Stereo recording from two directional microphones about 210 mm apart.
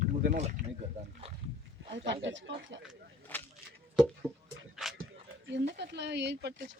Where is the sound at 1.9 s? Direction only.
60° right (ahead or behind).